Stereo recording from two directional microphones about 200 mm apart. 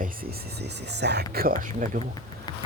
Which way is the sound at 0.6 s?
55° right (ahead or behind).